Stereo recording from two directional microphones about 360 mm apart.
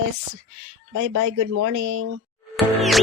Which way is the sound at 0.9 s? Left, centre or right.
Right.